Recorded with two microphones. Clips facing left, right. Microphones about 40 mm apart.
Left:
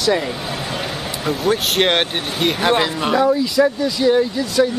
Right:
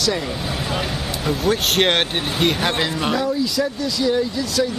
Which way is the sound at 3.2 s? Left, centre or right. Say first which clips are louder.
Left 6 dB; centre.